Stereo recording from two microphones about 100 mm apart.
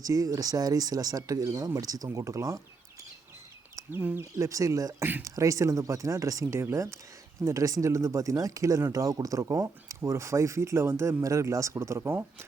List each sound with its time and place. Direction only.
0.0 s speech: 35° right (ahead or behind)
4.2 s speech: 30° right (ahead or behind)